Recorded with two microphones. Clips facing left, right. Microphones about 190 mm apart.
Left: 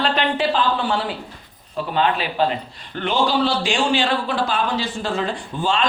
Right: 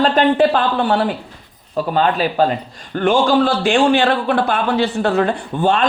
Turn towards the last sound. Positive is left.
turn(degrees=-60)  # may be behind; listen again after turning